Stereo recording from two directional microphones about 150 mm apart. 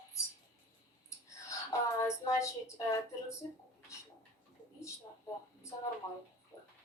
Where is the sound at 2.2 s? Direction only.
20° left (ahead or behind).